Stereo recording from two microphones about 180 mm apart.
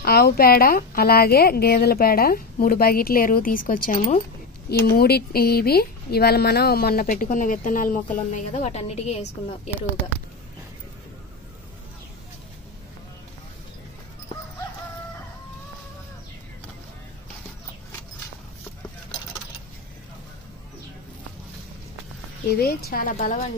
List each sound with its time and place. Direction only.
0.0 s speech: 60° left (ahead or behind); by 9.6 s 40° left (ahead or behind)
22.5 s speech: 60° left (ahead or behind)